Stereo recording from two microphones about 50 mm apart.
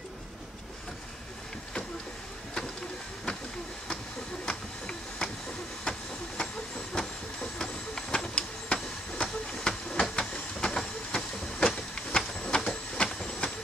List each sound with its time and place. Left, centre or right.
4.5 s a sound: centre
5.9 s vehicle: centre
10.1 s train: centre
11.9 s printer: centre